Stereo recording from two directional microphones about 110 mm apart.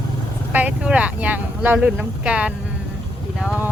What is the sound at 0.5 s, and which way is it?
Speech, 10° right (ahead or behind).